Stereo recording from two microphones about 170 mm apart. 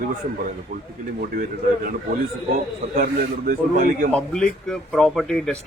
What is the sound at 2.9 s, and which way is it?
A man's voice, 50° right (ahead or behind).